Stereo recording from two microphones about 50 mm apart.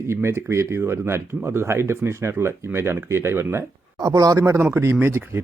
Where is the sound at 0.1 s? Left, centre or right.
Right.